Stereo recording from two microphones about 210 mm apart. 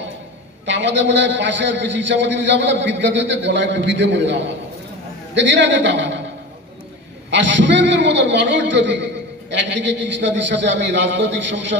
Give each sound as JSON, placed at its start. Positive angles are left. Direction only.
{"t": 0.7, "sound": "a man's voice", "side_deg": -60}
{"t": 7.2, "sound": "a man's voice", "side_deg": -60}